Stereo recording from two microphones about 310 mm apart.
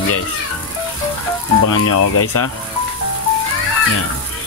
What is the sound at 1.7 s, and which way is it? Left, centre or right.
Speech, left.